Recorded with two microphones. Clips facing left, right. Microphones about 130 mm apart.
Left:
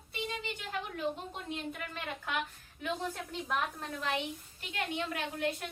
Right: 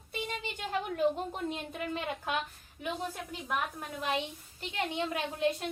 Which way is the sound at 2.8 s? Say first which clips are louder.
Even; 10° right (ahead or behind).